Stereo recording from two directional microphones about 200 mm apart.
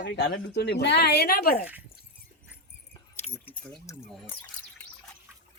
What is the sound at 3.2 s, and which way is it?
Keys jangling, 30° left (ahead or behind).